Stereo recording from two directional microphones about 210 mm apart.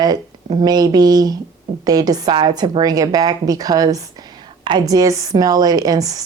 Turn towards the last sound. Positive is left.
turn(degrees=-15)  # may be behind; listen again after turning